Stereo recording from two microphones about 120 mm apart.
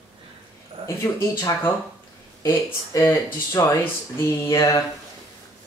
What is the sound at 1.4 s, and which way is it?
Speech, 25° left (ahead or behind).